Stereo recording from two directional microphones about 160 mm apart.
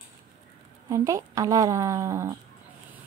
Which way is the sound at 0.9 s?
20° right (ahead or behind).